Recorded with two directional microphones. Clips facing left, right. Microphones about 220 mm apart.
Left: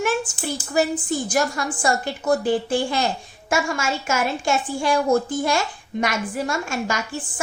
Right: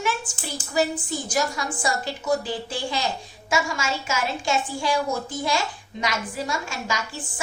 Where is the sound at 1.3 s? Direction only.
55° left (ahead or behind).